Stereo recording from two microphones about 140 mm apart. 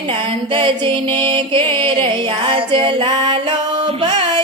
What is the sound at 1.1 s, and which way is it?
Music, 35° right (ahead or behind).